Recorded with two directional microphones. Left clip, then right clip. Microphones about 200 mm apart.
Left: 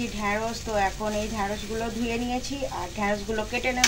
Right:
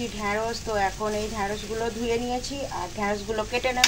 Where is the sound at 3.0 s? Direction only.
15° right (ahead or behind).